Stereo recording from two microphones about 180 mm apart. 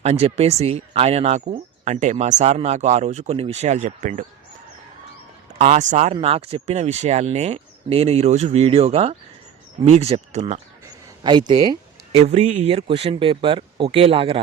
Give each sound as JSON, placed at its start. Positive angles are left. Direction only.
{"t": 0.0, "sound": "speech", "side_deg": -35}
{"t": 5.5, "sound": "speech", "side_deg": -40}
{"t": 11.2, "sound": "speech", "side_deg": -25}
{"t": 12.2, "sound": "speech", "side_deg": -35}